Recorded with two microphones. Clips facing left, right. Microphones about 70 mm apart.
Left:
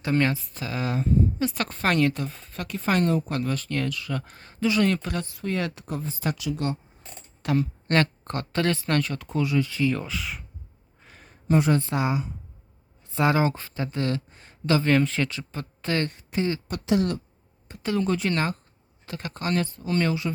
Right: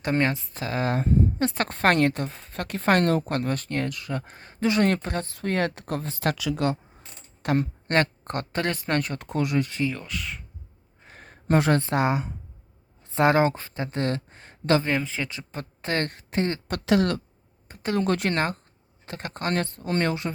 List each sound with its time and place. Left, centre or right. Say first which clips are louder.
0.1 s speech: left 1 dB; right
4.6 s speech: right 1 dB; right
5.3 s speech: right 5 dB; right
5.8 s speech: right 3 dB; right
7.4 s a woman's voice: even; right
10.0 s speech: left 2 dB; centre
11.1 s a sound: even; right
11.9 s speech: right 2 dB; right
14.8 s speech: left 5 dB; centre
15.3 s speech: left 1 dB; right
16.0 s speech: even; right
16.7 s speech: right 3 dB; right
17.9 s speech: right 1 dB; right
18.3 s speech: right 1 dB; right